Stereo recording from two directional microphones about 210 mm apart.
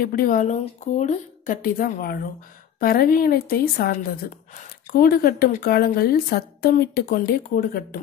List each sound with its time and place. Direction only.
0.0 s a woman's voice: 45° left (ahead or behind)